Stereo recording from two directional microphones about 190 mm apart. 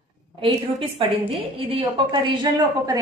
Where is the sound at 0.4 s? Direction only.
30° right (ahead or behind).